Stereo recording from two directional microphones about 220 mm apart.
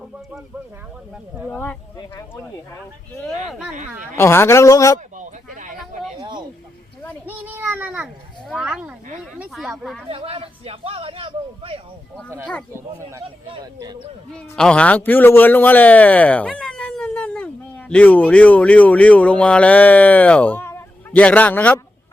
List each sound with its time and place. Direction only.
1.1 s a child's voice: centre (ahead or behind)
3.2 s a child's voice: centre (ahead or behind)
4.2 s a man's voice: 10° left (ahead or behind)
5.1 s a sound: 35° right (ahead or behind)
6.1 s speech: 20° right (ahead or behind)
7.3 s a child's voice: 10° right (ahead or behind)
10.1 s a man's voice: 25° right (ahead or behind)
12.7 s speech: 15° right (ahead or behind)
14.5 s a man's voice: 5° left (ahead or behind)